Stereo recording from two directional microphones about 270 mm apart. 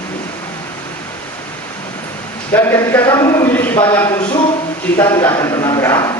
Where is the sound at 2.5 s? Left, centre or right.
Centre.